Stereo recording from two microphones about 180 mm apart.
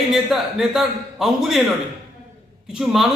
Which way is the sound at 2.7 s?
5° right (ahead or behind).